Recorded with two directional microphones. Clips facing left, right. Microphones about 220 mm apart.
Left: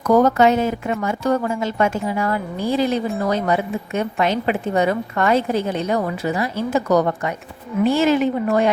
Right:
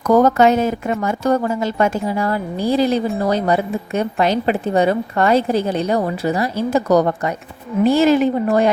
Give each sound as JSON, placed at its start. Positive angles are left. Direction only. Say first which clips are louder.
{"t": 0.2, "sound": "speech", "louder": "right 2 dB", "side_deg": -45}